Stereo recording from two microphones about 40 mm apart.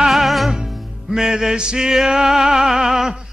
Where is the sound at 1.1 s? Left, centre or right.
Centre.